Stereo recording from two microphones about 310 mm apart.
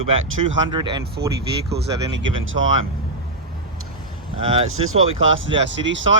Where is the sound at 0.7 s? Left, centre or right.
Centre.